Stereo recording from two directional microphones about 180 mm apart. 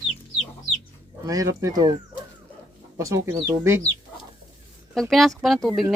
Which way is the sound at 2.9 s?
15° right (ahead or behind).